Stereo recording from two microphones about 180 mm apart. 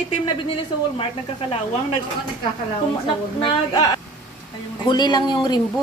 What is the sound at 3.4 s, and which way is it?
A woman's voice, 25° left (ahead or behind).